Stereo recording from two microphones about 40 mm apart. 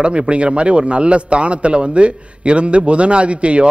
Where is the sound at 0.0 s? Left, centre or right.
Right.